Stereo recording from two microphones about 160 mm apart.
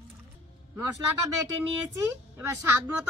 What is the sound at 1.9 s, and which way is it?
Speech, 15° right (ahead or behind).